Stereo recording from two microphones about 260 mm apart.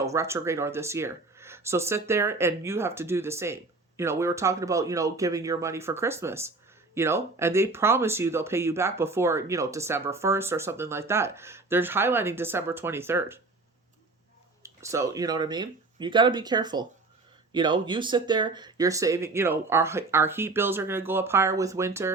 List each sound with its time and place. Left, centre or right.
0.0 s speech: centre
14.6 s speech: centre